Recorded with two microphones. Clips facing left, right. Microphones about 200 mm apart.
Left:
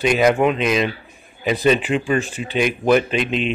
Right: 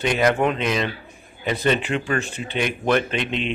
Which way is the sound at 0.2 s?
10° left (ahead or behind).